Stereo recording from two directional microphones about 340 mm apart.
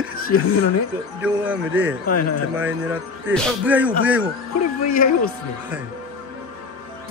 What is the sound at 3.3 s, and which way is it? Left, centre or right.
Speech, centre.